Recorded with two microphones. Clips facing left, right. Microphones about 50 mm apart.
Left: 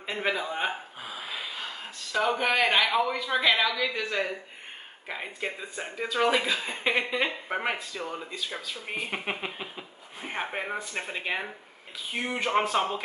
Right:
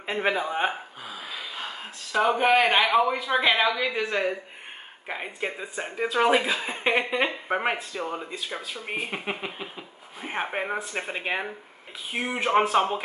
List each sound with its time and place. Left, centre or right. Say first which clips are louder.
0.0 s speech: right 4 dB; centre
1.0 s a sound: left 1 dB; centre
2.1 s speech: right 4 dB; centre
5.9 s speech: right 3 dB; centre